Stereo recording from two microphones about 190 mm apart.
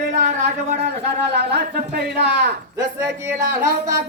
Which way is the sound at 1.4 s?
55° right (ahead or behind).